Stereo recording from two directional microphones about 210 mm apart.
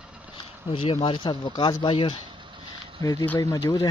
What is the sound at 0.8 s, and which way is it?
Speech, 25° left (ahead or behind).